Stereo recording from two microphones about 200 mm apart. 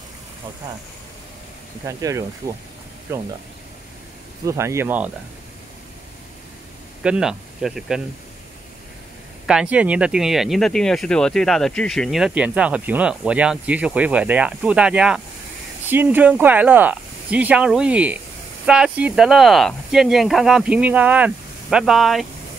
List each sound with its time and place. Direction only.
1.9 s speech: 15° right (ahead or behind)
4.5 s speech: 15° right (ahead or behind)
7.0 s speech: 5° right (ahead or behind)
9.5 s speech: 5° right (ahead or behind)